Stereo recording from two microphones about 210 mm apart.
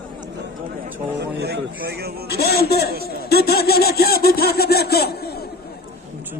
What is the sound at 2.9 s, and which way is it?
Speech, 45° right (ahead or behind).